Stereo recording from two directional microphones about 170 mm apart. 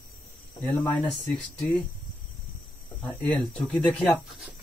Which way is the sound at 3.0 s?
10° left (ahead or behind).